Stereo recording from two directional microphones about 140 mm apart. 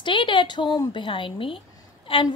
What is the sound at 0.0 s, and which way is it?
A woman's voice, 35° left (ahead or behind).